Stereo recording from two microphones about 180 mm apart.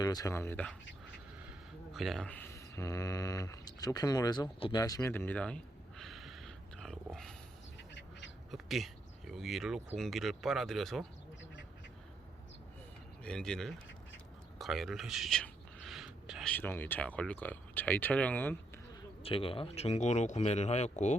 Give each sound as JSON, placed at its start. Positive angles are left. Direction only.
{"t": 0.0, "sound": "speech", "side_deg": 20}
{"t": 1.9, "sound": "speech", "side_deg": 0}
{"t": 8.4, "sound": "speech", "side_deg": 0}
{"t": 13.2, "sound": "speech", "side_deg": 5}
{"t": 14.6, "sound": "a sound", "side_deg": 0}
{"t": 16.5, "sound": "speech", "side_deg": 10}
{"t": 19.2, "sound": "speech", "side_deg": 30}